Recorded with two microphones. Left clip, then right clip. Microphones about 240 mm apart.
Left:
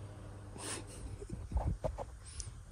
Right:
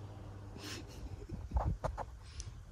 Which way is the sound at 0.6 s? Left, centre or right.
Centre.